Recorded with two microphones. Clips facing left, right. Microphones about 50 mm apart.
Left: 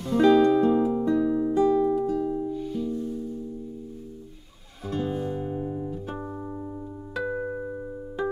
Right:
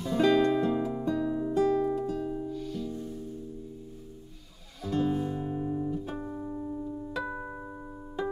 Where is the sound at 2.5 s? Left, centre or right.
Centre.